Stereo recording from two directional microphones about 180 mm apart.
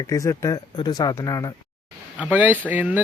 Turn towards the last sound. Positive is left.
turn(degrees=-10)  # may be behind; listen again after turning